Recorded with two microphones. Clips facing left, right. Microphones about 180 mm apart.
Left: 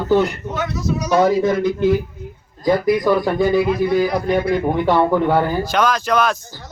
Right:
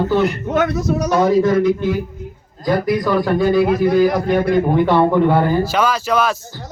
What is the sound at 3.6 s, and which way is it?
Speech, 50° right (ahead or behind).